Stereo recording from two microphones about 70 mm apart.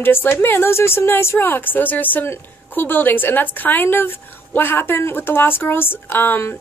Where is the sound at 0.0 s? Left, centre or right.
Left.